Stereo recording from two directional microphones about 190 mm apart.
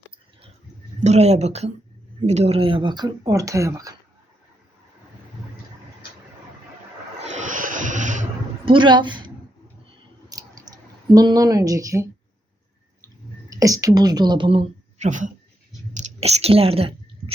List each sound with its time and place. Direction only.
0.9 s speech: 35° right (ahead or behind); by 3.9 s 15° right (ahead or behind)
7.2 s a sound: 40° right (ahead or behind)
8.6 s a woman's voice: 25° right (ahead or behind)
9.8 s clicking: 20° right (ahead or behind)
13.5 s speech: 20° right (ahead or behind)
14.9 s speech: 40° right (ahead or behind)
16.0 s chewing: 35° right (ahead or behind)